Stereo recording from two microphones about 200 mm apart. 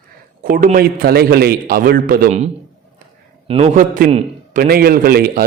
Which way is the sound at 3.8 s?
45° right (ahead or behind).